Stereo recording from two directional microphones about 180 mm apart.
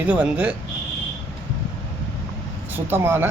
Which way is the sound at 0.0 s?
10° right (ahead or behind).